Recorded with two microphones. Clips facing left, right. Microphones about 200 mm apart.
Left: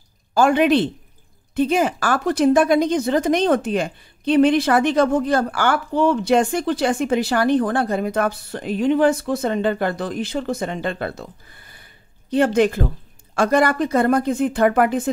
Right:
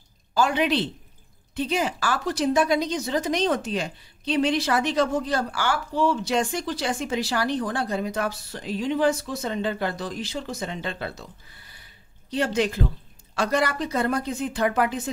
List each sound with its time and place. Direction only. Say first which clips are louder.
0.3 s speech: left 7 dB; 50° left (ahead or behind)